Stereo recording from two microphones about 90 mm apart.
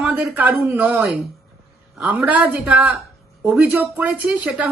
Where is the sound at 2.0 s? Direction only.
15° right (ahead or behind).